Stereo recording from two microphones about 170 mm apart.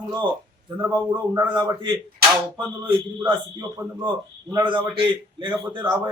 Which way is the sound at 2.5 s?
30° right (ahead or behind).